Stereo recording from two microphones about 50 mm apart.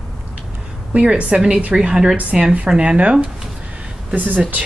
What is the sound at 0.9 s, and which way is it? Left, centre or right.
A woman's voice, right.